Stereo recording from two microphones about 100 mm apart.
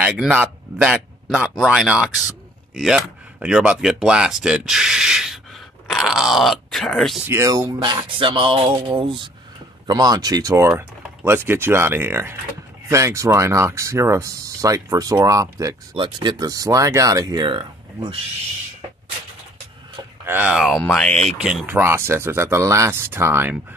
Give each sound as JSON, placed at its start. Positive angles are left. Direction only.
{"t": 0.0, "sound": "speech", "side_deg": -10}
{"t": 7.2, "sound": "speech", "side_deg": -30}
{"t": 7.8, "sound": "speech", "side_deg": -50}
{"t": 9.8, "sound": "speech", "side_deg": -40}
{"t": 11.2, "sound": "speech", "side_deg": -25}
{"t": 16.0, "sound": "speech", "side_deg": -45}
{"t": 20.2, "sound": "speech", "side_deg": -20}
{"t": 20.5, "sound": "speech", "side_deg": 0}
{"t": 21.4, "sound": "speech", "side_deg": -5}
{"t": 21.6, "sound": "speech", "side_deg": -20}